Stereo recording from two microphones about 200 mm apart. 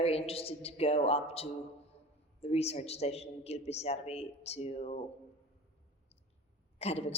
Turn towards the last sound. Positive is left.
turn(degrees=30)  # may be behind; listen again after turning